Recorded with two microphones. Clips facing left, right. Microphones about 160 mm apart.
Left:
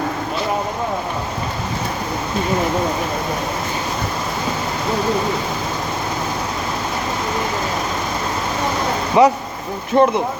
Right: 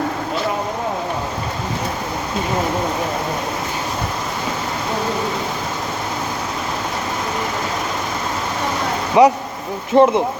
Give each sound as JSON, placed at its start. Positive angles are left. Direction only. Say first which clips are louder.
{"t": 9.2, "sound": "speech", "louder": "right 1 dB", "side_deg": -15}
{"t": 9.9, "sound": "speech", "louder": "right 2 dB", "side_deg": -25}